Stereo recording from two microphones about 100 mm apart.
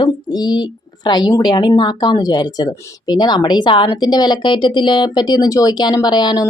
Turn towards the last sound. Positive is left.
turn(degrees=45)  # may be behind; listen again after turning